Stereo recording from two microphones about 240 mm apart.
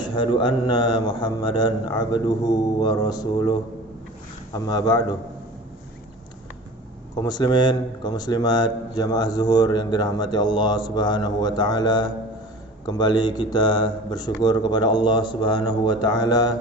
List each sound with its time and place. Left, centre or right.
0.0 s a man's voice: centre
7.2 s a man's voice: centre